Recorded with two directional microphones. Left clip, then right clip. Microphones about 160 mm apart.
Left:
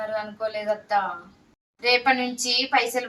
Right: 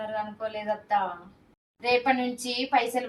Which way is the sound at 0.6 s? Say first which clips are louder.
Left 2 dB; centre (ahead or behind).